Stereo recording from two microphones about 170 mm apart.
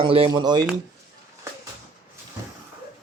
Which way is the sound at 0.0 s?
30° right (ahead or behind).